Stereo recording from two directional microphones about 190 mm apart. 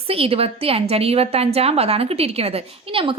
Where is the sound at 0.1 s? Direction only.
30° right (ahead or behind).